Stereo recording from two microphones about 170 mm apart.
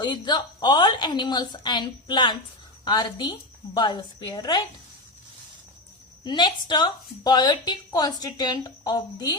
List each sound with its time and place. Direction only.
0.0 s a woman's voice: 25° left (ahead or behind)
6.2 s a woman's voice: 25° left (ahead or behind)